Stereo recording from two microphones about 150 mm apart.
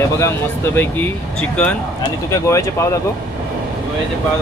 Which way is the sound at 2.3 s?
20° left (ahead or behind).